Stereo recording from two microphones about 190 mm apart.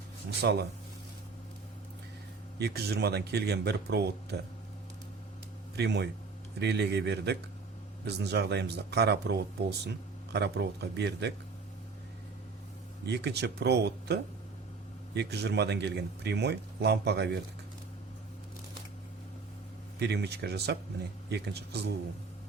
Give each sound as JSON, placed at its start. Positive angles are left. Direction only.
{"t": 0.4, "sound": "a man's voice", "side_deg": -60}
{"t": 2.6, "sound": "a man's voice", "side_deg": -60}
{"t": 5.7, "sound": "a man's voice", "side_deg": -60}
{"t": 13.1, "sound": "a man's voice", "side_deg": -60}
{"t": 20.0, "sound": "a man's voice", "side_deg": -60}